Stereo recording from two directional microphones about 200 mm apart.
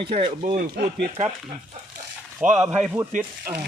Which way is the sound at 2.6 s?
5° right (ahead or behind).